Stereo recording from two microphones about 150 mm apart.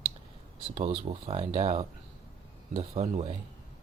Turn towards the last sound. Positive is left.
turn(degrees=-50)  # may be behind; listen again after turning